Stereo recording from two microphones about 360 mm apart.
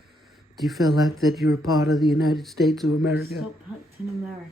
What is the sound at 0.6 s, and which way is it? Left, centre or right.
Speech, centre.